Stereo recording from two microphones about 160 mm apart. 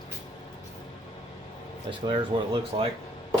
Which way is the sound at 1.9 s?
30° right (ahead or behind).